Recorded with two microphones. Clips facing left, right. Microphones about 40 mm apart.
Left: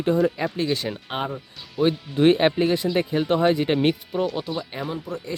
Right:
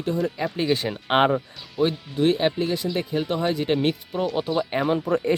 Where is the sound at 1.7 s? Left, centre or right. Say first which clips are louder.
Left 1 dB; centre.